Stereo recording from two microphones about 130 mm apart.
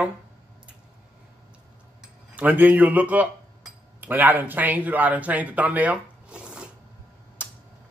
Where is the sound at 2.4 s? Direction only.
10° right (ahead or behind).